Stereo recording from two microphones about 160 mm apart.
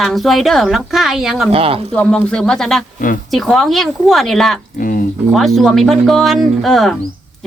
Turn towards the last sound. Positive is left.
turn(degrees=0)  # may be behind; listen again after turning